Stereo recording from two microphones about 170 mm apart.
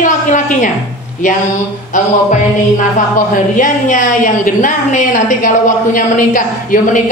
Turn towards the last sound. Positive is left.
turn(degrees=50)  # may be behind; listen again after turning